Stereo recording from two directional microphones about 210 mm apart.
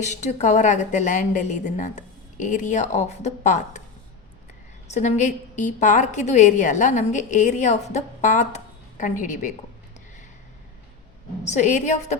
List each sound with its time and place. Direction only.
0.0 s a woman's voice: 35° left (ahead or behind)
4.9 s a woman's voice: 35° left (ahead or behind)
11.4 s a woman's voice: 35° left (ahead or behind)